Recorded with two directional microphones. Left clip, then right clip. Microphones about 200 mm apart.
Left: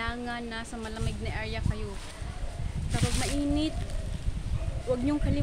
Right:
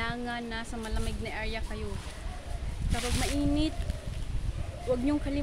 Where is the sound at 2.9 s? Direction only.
5° right (ahead or behind).